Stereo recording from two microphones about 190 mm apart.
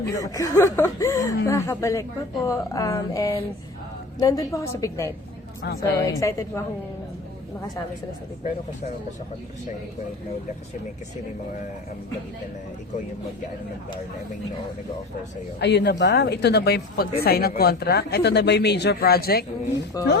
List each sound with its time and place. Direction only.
0.0 s a woman's voice: 15° left (ahead or behind)
15.6 s speech: 60° left (ahead or behind)
19.9 s speech: 20° left (ahead or behind)